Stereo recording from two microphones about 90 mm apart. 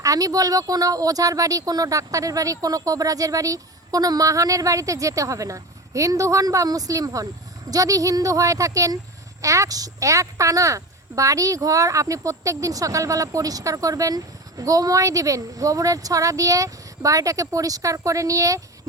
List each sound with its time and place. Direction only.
0.0 s speech: 40° right (ahead or behind)